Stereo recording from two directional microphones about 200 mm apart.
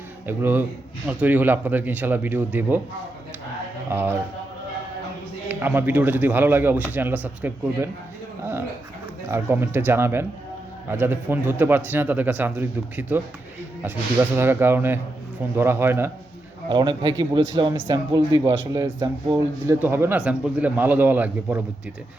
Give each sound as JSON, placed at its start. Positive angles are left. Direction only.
{"t": 0.3, "sound": "speech", "side_deg": -10}
{"t": 3.8, "sound": "speech", "side_deg": -10}
{"t": 5.5, "sound": "speech", "side_deg": -10}
{"t": 9.3, "sound": "speech", "side_deg": -10}
{"t": 16.6, "sound": "a man's voice", "side_deg": -20}